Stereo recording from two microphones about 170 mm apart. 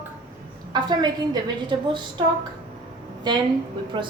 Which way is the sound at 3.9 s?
30° right (ahead or behind).